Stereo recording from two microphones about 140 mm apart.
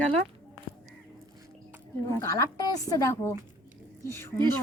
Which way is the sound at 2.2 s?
20° left (ahead or behind).